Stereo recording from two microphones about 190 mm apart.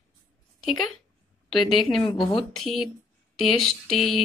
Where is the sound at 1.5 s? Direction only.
Centre (ahead or behind).